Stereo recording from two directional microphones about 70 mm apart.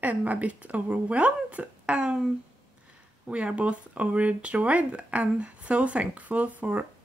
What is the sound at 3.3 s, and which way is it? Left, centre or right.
Speech, centre.